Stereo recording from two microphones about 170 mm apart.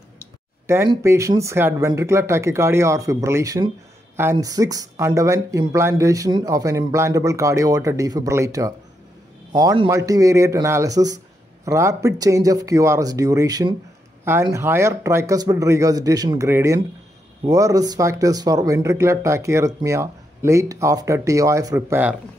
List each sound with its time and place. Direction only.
0.7 s speech: 15° right (ahead or behind)